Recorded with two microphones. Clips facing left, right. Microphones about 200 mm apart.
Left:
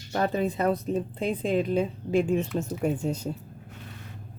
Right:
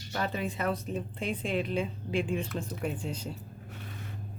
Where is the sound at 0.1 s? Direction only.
40° left (ahead or behind).